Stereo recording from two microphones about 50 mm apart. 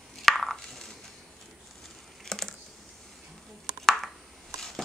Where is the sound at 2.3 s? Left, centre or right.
Centre.